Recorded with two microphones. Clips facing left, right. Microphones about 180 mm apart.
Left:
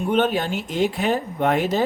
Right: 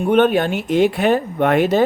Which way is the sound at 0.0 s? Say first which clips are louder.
Right 6 dB; 60° right (ahead or behind).